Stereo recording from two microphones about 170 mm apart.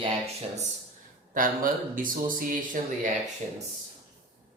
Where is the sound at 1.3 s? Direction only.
55° right (ahead or behind).